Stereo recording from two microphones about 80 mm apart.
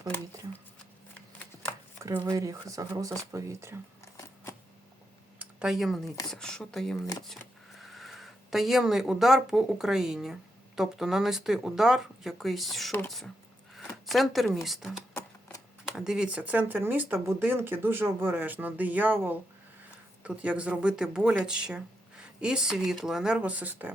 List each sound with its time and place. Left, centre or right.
2.2 s speech: right
5.5 s speech: centre; by 23.9 s right